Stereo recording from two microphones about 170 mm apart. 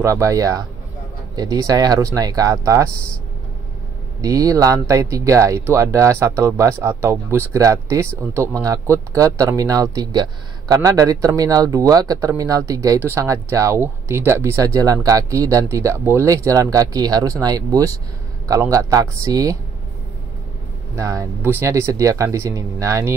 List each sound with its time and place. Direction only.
0.0 s a man's voice: 15° right (ahead or behind)
4.2 s a man's voice: 20° right (ahead or behind)
20.9 s speech: 20° right (ahead or behind)